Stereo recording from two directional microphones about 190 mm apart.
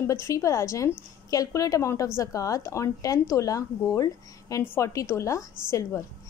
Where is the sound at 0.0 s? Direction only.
15° left (ahead or behind).